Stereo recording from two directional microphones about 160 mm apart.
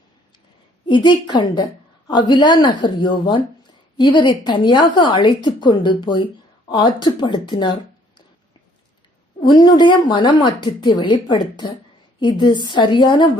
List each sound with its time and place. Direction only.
0.9 s speech: 30° left (ahead or behind)
9.4 s speech: 25° left (ahead or behind)